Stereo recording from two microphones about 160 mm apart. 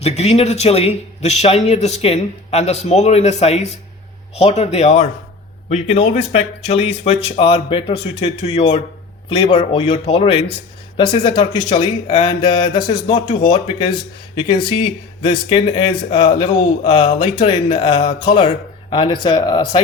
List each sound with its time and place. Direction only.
0.0 s a man's voice: 40° left (ahead or behind)